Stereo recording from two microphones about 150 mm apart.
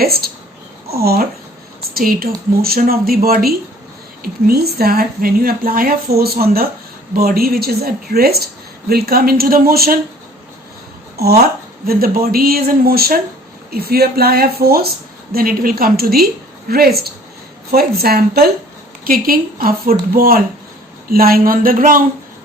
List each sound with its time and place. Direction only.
0.0 s speech: 90° right
1.9 s speech: 80° right
11.2 s speech: 90° right
19.0 s speech: 75° right (ahead or behind)